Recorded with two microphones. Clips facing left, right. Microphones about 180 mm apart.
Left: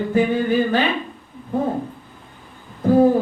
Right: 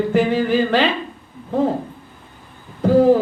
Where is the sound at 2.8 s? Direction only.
90° right.